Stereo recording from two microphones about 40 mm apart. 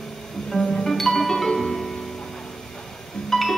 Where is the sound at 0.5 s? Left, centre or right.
Centre.